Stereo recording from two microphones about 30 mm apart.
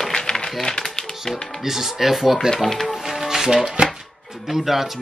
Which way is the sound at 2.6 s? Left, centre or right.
Centre.